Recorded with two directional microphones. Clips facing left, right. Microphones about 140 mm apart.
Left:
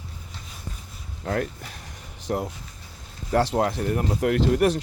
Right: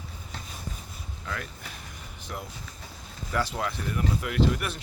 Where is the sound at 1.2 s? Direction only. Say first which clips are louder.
Left 11 dB; 45° left (ahead or behind).